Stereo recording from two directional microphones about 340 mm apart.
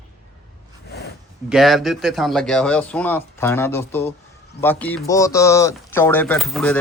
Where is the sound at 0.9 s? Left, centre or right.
Left.